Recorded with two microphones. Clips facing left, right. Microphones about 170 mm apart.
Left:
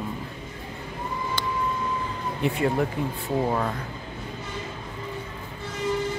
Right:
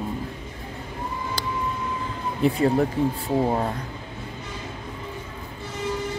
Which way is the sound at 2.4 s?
35° right (ahead or behind).